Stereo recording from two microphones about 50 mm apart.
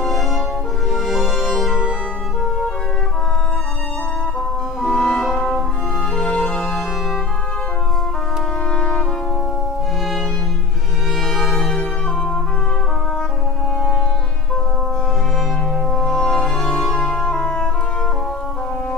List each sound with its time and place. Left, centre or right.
0.9 s music: centre
4.8 s music: centre
6.3 s music: centre
8.7 s brass instrument: centre
11.3 s music: centre
15.9 s music: centre